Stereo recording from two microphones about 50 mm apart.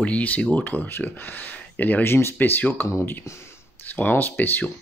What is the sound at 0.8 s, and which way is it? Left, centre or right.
Speech, left.